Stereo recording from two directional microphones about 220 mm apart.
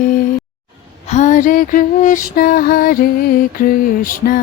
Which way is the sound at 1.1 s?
35° left (ahead or behind).